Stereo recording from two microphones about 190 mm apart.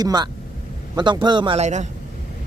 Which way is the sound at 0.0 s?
20° right (ahead or behind).